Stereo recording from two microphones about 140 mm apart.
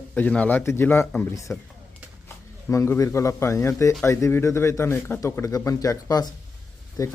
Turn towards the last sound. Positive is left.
turn(degrees=25)  # may be behind; listen again after turning